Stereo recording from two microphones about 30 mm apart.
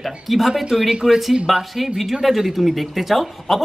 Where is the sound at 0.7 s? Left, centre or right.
Centre.